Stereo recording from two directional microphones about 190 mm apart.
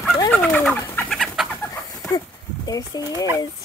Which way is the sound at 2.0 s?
20° left (ahead or behind).